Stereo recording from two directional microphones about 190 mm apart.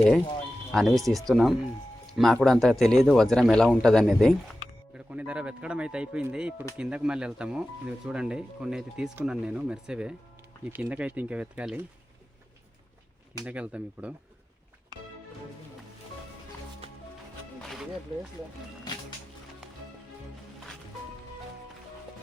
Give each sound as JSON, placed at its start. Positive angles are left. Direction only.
{"t": 0.7, "sound": "speech", "side_deg": 0}
{"t": 13.4, "sound": "speech", "side_deg": -5}
{"t": 17.6, "sound": "music", "side_deg": 0}